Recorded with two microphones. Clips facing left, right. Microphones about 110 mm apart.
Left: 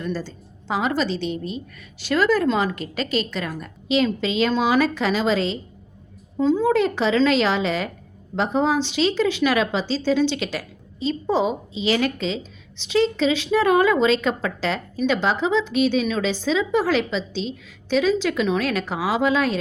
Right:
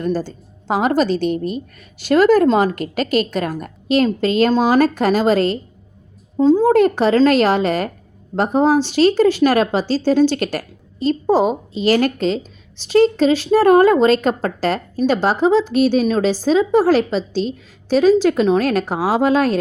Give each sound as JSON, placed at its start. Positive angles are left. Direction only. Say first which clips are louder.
{"t": 0.0, "sound": "a woman's voice", "louder": "right 7 dB", "side_deg": -45}
{"t": 6.3, "sound": "a woman's voice", "louder": "right 6 dB", "side_deg": -35}